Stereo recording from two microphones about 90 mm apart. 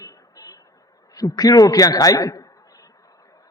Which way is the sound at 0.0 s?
40° left (ahead or behind).